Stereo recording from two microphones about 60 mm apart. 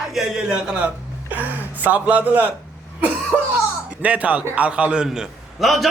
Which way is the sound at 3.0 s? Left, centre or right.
Right.